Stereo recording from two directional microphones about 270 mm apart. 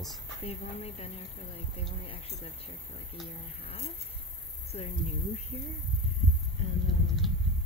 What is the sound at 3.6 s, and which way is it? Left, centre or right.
A woman's voice, left.